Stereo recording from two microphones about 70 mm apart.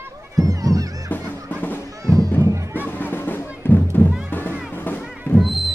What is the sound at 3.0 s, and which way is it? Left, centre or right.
Music, left.